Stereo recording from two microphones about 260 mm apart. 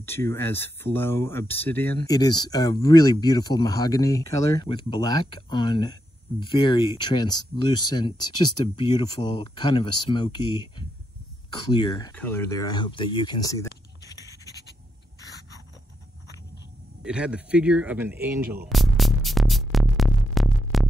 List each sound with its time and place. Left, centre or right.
0.0 s speech: centre
12.1 s speech: centre
17.0 s speech: centre
18.7 s music: centre